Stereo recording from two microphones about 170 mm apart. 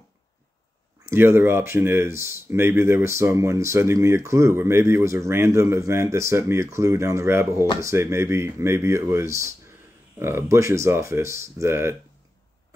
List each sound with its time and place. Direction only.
1.1 s speech: 15° right (ahead or behind)